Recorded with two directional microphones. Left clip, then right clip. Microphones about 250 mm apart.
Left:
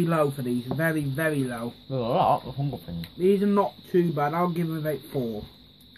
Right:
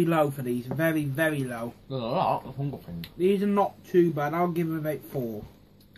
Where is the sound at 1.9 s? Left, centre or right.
Left.